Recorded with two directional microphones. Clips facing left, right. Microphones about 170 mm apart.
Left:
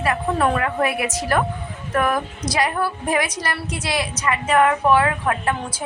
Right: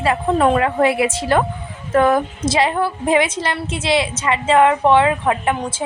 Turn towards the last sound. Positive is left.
turn(degrees=-20)  # may be behind; listen again after turning